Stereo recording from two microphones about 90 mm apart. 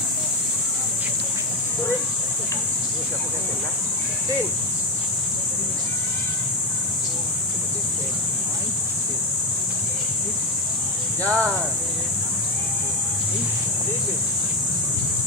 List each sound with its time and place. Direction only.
11.2 s speech: 10° left (ahead or behind)